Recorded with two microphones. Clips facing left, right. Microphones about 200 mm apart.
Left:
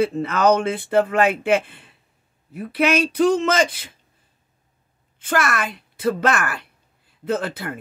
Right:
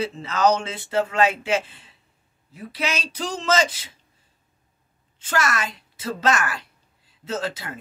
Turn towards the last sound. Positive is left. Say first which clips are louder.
# left 4 dB
turn(degrees=55)  # may be behind; listen again after turning